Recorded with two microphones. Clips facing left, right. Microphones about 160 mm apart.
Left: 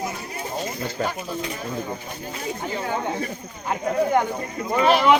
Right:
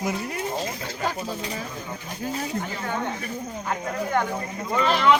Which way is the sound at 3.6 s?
15° left (ahead or behind).